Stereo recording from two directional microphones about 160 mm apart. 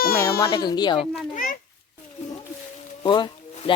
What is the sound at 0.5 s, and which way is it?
Speech, 25° left (ahead or behind).